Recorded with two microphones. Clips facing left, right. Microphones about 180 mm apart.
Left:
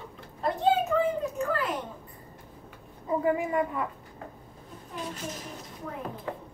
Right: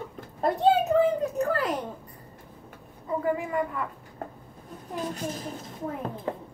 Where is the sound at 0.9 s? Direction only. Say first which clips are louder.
Right 4 dB; 40° right (ahead or behind).